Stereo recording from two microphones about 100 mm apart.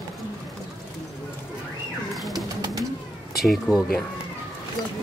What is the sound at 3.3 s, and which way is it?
Speech, centre (ahead or behind).